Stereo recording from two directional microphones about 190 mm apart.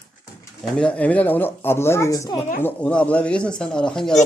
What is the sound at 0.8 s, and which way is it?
Speech, 5° left (ahead or behind).